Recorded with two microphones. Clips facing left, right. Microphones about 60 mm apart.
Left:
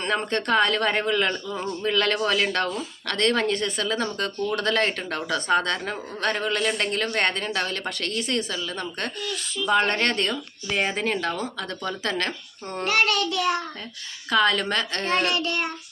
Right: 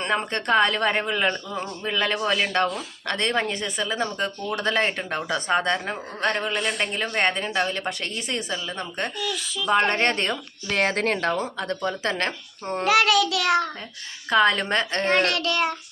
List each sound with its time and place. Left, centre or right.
0.0 s speech: centre
6.4 s speech: centre
7.1 s speech: centre
10.7 s speech: right
11.3 s speech: right
13.0 s child singing: right
14.3 s speech: right
15.1 s child singing: right